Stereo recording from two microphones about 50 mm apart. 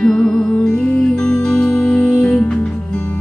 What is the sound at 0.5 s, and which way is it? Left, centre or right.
Music, left.